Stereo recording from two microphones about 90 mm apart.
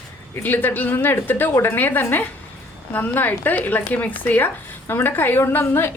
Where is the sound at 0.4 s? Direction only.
20° left (ahead or behind).